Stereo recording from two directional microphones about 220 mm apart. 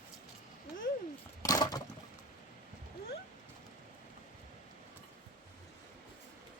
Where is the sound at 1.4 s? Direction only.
15° left (ahead or behind).